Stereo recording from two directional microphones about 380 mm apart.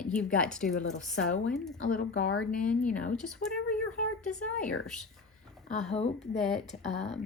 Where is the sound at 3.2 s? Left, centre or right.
Centre.